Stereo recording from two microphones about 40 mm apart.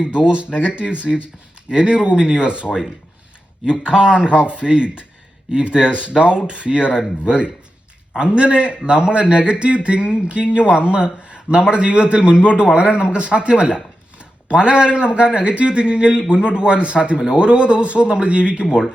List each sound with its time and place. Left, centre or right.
0.0 s speech: right
3.7 s speech: right